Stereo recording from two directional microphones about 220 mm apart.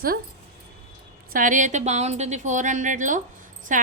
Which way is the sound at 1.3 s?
35° right (ahead or behind).